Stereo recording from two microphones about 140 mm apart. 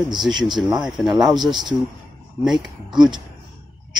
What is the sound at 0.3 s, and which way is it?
Speech, 30° right (ahead or behind).